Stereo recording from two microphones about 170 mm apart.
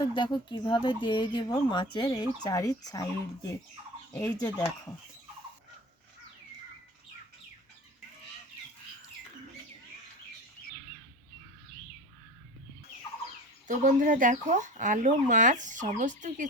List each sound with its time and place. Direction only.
0.0 s speech: 25° left (ahead or behind)
13.7 s speech: 50° right (ahead or behind)